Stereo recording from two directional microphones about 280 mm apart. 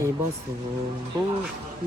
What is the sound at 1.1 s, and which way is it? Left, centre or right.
Speech, centre.